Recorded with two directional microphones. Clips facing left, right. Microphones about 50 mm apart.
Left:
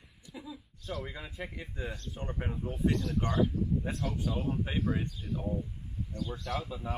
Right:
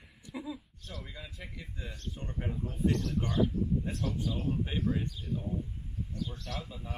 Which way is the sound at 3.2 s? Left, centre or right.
Left.